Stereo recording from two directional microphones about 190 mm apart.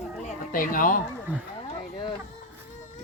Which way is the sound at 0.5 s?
45° left (ahead or behind).